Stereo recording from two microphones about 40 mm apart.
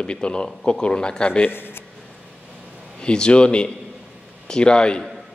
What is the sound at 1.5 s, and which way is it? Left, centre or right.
Speech, left.